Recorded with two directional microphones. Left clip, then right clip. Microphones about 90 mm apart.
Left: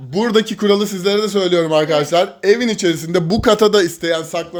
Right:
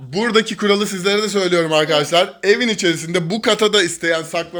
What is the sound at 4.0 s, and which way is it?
Speech, 10° left (ahead or behind).